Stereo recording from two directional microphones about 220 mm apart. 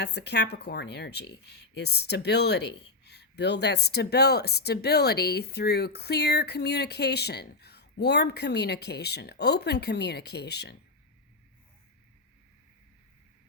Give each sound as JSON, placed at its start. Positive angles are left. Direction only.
{"t": 0.0, "sound": "speech", "side_deg": 50}